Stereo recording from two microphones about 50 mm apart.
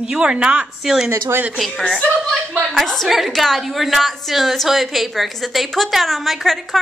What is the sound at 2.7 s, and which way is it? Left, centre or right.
A woman's voice, centre.